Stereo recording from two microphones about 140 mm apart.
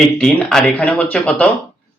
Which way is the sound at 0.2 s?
10° left (ahead or behind).